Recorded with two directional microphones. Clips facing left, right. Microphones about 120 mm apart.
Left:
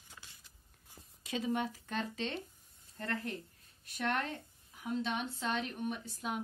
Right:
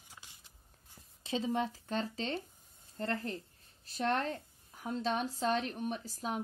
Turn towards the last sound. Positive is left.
turn(degrees=-35)  # may be behind; listen again after turning